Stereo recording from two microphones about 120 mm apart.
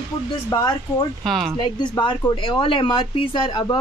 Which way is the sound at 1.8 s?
40° left (ahead or behind).